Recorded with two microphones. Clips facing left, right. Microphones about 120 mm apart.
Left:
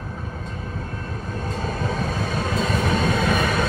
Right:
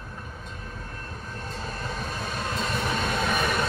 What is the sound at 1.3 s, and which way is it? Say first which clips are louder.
Train: left 8 dB; 50° left (ahead or behind).